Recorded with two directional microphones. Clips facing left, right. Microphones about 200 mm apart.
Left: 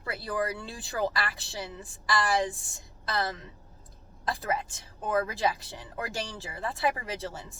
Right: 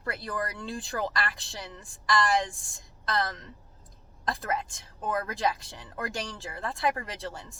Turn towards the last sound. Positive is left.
turn(degrees=5)  # may be behind; listen again after turning